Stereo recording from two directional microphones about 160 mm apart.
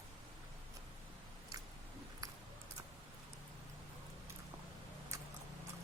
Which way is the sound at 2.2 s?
20° right (ahead or behind).